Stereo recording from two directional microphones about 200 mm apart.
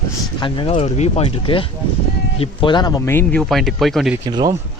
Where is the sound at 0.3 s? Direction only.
25° left (ahead or behind).